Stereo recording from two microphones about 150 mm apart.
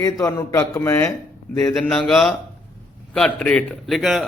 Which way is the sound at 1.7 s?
Centre (ahead or behind).